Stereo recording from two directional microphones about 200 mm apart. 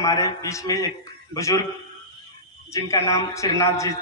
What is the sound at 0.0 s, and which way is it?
A man's voice, 15° left (ahead or behind).